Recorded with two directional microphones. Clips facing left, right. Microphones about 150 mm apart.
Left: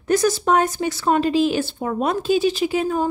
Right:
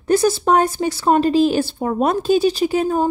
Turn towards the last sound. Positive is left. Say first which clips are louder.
# right 3 dB
turn(degrees=-40)  # may be behind; listen again after turning